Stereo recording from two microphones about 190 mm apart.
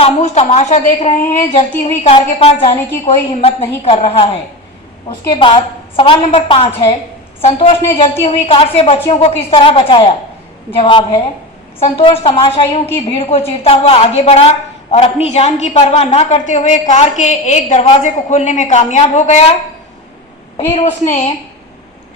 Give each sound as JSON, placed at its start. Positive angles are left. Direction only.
{"t": 0.0, "sound": "a woman's voice", "side_deg": 35}
{"t": 20.7, "sound": "a woman's voice", "side_deg": 35}